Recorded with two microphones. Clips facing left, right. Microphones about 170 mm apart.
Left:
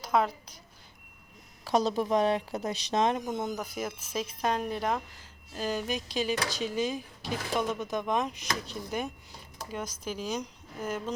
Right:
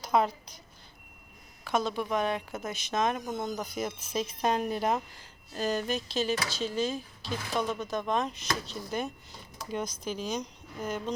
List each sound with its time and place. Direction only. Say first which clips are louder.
0.0 s a woman's voice: right 1 dB; centre (ahead or behind)
1.6 s speech: left 3 dB; 35° left (ahead or behind)
3.2 s speech: left 1 dB; 10° left (ahead or behind); by 5.0 s 5° right (ahead or behind)
5.5 s speech: right 2 dB; 5° left (ahead or behind)